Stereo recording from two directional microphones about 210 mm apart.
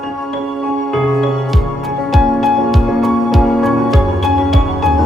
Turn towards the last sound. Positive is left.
turn(degrees=0)  # may be behind; listen again after turning